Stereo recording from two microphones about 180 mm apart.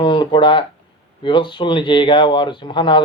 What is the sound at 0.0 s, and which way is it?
Speech, 25° left (ahead or behind).